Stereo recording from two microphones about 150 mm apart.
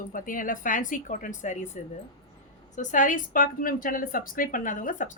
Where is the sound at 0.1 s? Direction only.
65° left (ahead or behind).